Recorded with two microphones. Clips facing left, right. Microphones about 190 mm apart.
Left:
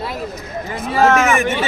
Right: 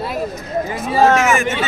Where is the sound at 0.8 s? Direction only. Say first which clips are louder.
Even; 15° right (ahead or behind).